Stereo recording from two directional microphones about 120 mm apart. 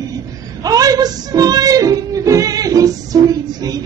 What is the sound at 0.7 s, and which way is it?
Music, 30° right (ahead or behind).